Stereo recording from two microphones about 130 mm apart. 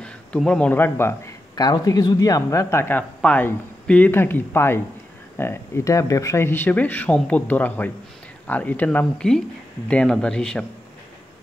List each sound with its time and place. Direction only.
0.0 s speech: 10° left (ahead or behind)
1.5 s speech: 30° left (ahead or behind); by 10.6 s 5° left (ahead or behind)